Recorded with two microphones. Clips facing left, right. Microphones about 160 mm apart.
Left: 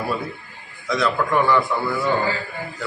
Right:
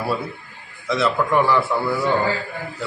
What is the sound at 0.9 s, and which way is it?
A man's voice, 5° right (ahead or behind).